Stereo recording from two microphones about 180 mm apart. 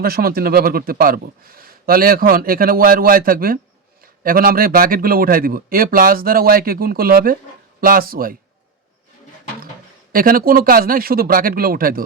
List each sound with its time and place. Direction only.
0.0 s speech: 55° right (ahead or behind)
10.1 s speech: 55° right (ahead or behind)